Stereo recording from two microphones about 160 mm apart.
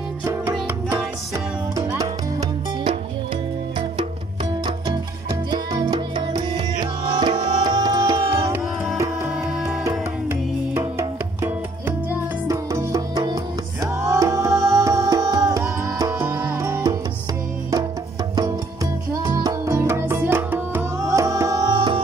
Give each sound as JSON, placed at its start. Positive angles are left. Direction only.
{"t": 4.6, "sound": "music", "side_deg": -25}
{"t": 8.9, "sound": "tabla", "side_deg": -20}
{"t": 9.8, "sound": "music", "side_deg": -15}
{"t": 14.5, "sound": "music", "side_deg": 0}
{"t": 14.8, "sound": "music", "side_deg": -20}
{"t": 16.3, "sound": "music", "side_deg": -10}
{"t": 16.5, "sound": "music", "side_deg": -20}
{"t": 19.2, "sound": "music", "side_deg": -25}